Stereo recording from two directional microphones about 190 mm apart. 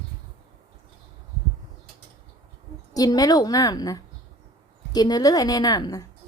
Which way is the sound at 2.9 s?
20° left (ahead or behind).